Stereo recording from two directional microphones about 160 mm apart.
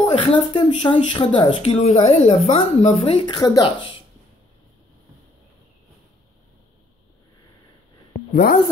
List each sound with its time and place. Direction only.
0.4 s a woman's voice: 30° left (ahead or behind)
8.3 s a woman's voice: 75° left (ahead or behind)